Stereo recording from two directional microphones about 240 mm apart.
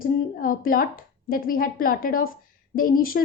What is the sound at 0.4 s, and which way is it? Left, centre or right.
A woman's voice, left.